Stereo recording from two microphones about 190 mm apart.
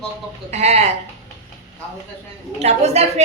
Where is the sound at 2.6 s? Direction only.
35° right (ahead or behind).